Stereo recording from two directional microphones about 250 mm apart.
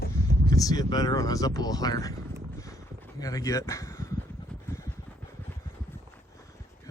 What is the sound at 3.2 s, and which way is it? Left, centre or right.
Speech, centre.